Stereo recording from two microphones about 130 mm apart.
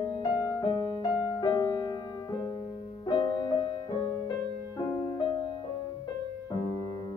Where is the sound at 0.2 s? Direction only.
30° left (ahead or behind).